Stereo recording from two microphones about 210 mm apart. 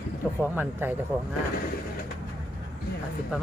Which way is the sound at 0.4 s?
10° right (ahead or behind).